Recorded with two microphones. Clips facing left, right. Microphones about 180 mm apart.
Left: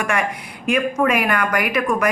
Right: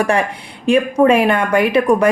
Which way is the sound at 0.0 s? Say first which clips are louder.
Right 6 dB; 30° right (ahead or behind).